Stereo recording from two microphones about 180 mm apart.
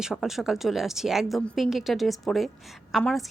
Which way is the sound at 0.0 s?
Centre (ahead or behind).